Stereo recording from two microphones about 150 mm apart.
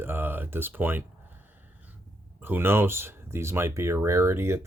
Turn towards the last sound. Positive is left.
turn(degrees=-15)  # may be behind; listen again after turning